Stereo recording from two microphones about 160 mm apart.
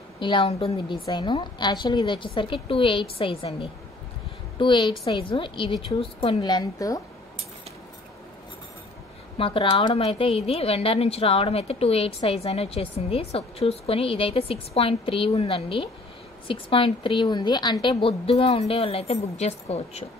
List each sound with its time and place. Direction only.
0.2 s a woman's voice: 30° left (ahead or behind)
9.4 s speech: 35° left (ahead or behind)